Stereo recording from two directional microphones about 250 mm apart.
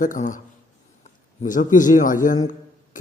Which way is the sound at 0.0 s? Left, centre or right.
Left.